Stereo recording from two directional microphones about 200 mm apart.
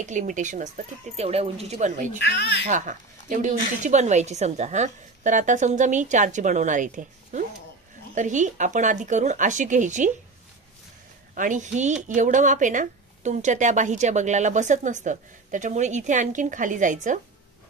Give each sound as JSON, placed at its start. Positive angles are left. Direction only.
{"t": 0.0, "sound": "speech", "side_deg": -40}
{"t": 2.1, "sound": "speech", "side_deg": 60}
{"t": 2.6, "sound": "speech", "side_deg": -40}
{"t": 11.3, "sound": "speech", "side_deg": -40}